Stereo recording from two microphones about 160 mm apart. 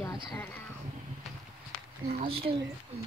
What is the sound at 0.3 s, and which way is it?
Speech, 10° left (ahead or behind).